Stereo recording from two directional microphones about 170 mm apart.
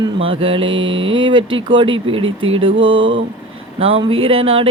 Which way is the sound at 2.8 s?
30° right (ahead or behind).